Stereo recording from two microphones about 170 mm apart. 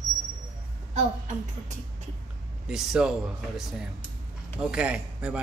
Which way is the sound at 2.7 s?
5° right (ahead or behind).